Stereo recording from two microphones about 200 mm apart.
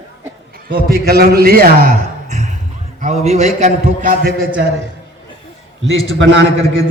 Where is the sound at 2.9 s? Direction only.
35° right (ahead or behind).